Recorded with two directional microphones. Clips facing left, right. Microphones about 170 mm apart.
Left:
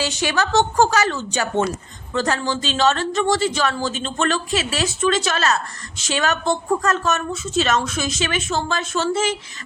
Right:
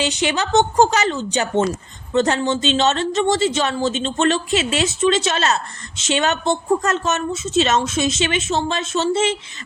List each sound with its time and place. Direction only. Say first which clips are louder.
0.0 s a woman's voice: right 1 dB; 20° right (ahead or behind)